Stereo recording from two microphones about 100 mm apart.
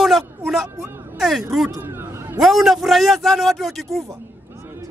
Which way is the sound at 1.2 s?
Centre (ahead or behind).